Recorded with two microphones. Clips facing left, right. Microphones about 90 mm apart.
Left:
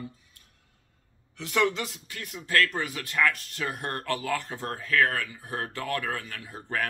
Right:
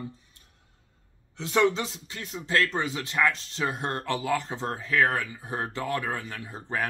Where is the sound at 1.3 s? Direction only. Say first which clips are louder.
Right 3 dB; 25° right (ahead or behind).